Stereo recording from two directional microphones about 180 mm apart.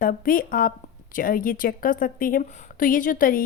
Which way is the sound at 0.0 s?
50° left (ahead or behind).